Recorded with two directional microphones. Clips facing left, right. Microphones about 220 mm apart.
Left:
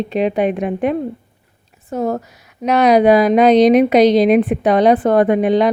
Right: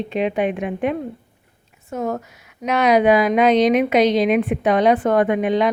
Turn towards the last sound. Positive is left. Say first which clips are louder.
# left 4 dB
turn(degrees=35)  # may be behind; listen again after turning